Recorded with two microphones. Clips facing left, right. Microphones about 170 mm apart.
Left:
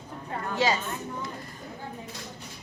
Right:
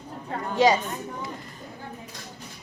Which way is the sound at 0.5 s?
15° right (ahead or behind).